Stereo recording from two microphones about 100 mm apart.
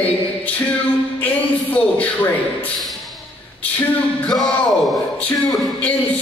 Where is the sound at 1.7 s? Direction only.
15° left (ahead or behind).